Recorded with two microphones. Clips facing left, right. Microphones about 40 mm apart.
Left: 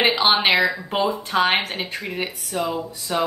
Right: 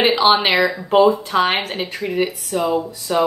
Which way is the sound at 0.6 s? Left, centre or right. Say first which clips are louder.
Right 2 dB; right.